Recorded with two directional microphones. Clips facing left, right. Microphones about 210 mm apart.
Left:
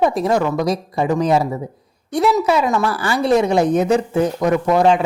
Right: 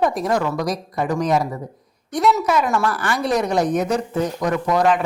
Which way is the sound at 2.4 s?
30° left (ahead or behind).